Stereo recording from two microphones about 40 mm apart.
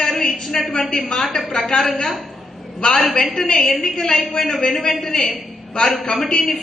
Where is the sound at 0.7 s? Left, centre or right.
Centre.